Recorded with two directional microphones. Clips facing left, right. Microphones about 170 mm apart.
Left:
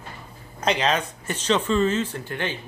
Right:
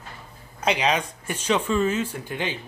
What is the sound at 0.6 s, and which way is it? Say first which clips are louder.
Speech: even; 10° right (ahead or behind).